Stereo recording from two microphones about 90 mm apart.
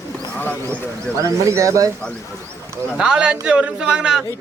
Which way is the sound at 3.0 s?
10° right (ahead or behind).